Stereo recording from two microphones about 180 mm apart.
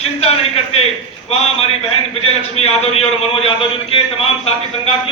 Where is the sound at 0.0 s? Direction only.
35° left (ahead or behind).